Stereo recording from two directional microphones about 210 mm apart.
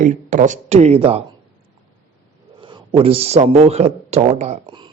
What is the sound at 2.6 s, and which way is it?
A man's voice, 25° right (ahead or behind).